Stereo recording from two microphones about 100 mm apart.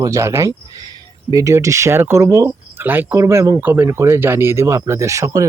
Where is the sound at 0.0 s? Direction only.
30° right (ahead or behind).